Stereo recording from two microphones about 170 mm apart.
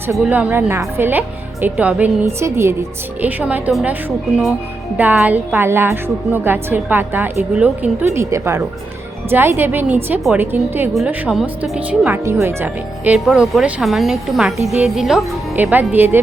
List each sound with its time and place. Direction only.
0.2 s a woman's voice: 10° right (ahead or behind)
4.9 s a woman's voice: 10° right (ahead or behind)